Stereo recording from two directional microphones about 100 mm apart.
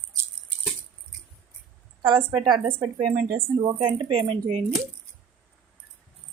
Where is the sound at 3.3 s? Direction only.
80° right.